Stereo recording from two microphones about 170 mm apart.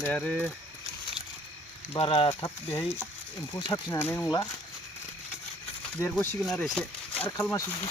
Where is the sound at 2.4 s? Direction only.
20° left (ahead or behind).